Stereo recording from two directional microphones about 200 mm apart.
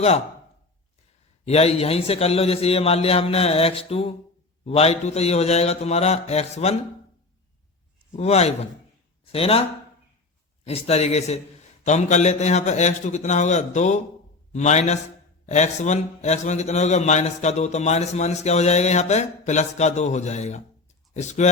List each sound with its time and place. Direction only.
1.5 s a man's voice: 30° left (ahead or behind)
8.1 s a man's voice: 30° left (ahead or behind)
10.7 s a man's voice: 30° left (ahead or behind)